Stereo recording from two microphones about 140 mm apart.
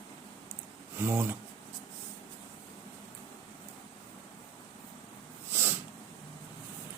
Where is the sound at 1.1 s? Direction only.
15° right (ahead or behind).